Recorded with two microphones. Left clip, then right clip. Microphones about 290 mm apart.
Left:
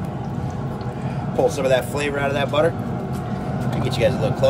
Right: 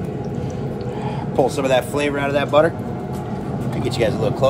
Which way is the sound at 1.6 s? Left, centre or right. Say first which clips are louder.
Right 2 dB; right.